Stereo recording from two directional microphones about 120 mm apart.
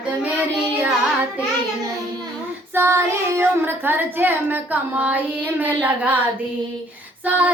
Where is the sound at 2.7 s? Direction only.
20° right (ahead or behind).